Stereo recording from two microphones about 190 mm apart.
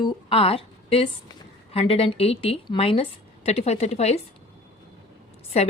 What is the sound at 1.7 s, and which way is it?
A woman's voice, 30° left (ahead or behind).